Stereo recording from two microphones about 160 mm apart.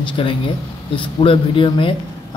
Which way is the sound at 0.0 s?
30° left (ahead or behind).